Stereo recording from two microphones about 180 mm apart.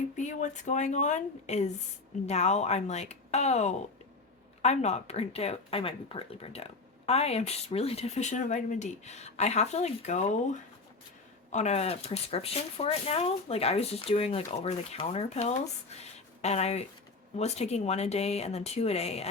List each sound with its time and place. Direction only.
0.2 s speech: 45° left (ahead or behind)